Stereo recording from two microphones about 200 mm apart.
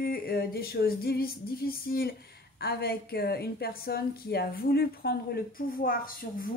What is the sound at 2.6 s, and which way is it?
A woman's voice, 50° left (ahead or behind).